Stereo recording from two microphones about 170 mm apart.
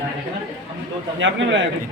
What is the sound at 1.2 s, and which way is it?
Speech, 90° right.